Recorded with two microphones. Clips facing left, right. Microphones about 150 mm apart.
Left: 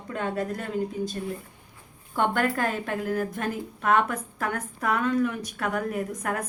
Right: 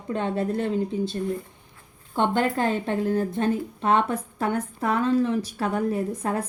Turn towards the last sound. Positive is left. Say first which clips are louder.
# right 3 dB
turn(degrees=-30)  # may be behind; listen again after turning